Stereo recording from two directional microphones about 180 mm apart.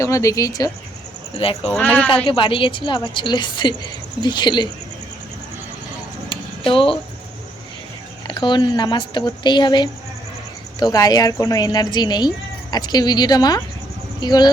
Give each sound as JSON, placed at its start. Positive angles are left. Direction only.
{"t": 0.0, "sound": "a woman's voice", "side_deg": 15}
{"t": 1.4, "sound": "speech", "side_deg": 30}
{"t": 1.7, "sound": "speech", "side_deg": 10}
{"t": 2.2, "sound": "a woman's voice", "side_deg": 30}
{"t": 6.7, "sound": "a woman's voice", "side_deg": 30}
{"t": 8.3, "sound": "a woman's voice", "side_deg": 25}